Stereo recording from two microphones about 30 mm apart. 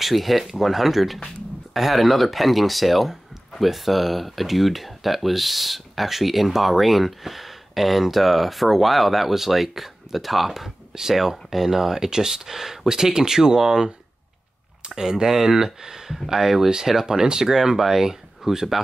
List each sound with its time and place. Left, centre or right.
0.0 s speech: centre
15.0 s speech: centre
17.0 s speech: right